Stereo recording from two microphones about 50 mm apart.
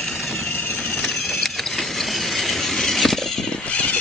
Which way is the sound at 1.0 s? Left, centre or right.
Centre.